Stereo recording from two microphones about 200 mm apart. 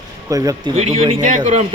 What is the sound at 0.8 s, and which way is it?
Speech, 30° right (ahead or behind).